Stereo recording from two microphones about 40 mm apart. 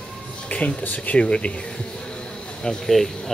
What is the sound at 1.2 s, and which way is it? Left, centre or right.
Speech, left.